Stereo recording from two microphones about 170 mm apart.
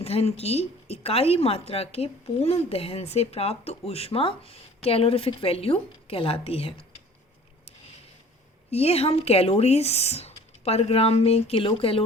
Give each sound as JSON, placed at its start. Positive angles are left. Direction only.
{"t": 0.0, "sound": "speech", "side_deg": 35}
{"t": 8.7, "sound": "speech", "side_deg": 35}